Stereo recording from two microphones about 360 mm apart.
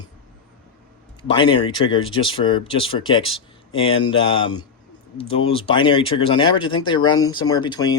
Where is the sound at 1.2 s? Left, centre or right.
Centre.